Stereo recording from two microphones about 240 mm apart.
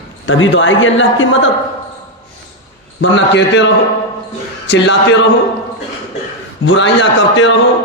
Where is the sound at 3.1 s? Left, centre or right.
Left.